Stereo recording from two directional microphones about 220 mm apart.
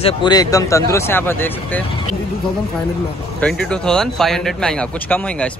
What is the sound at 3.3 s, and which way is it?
Speech, 5° left (ahead or behind).